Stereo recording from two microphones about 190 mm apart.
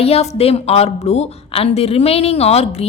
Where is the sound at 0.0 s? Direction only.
30° left (ahead or behind).